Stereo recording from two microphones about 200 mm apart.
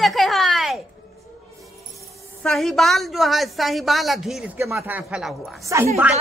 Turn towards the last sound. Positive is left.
turn(degrees=-15)  # may be behind; listen again after turning